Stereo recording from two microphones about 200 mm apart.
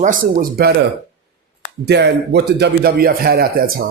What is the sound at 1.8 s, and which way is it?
A man's voice, 60° right (ahead or behind).